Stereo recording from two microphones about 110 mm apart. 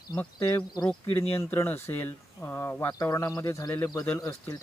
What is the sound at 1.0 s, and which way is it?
Speech, 25° left (ahead or behind).